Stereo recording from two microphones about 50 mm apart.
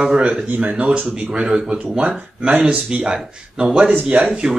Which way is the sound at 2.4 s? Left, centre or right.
Right.